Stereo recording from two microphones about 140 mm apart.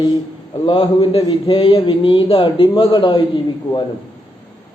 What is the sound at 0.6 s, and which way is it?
A man's voice, 35° left (ahead or behind).